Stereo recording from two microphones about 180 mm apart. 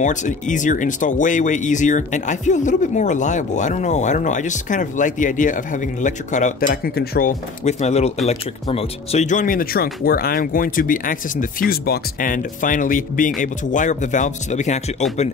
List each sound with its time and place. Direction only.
0.0 s speech: 45° left (ahead or behind)
7.6 s speech: 35° left (ahead or behind)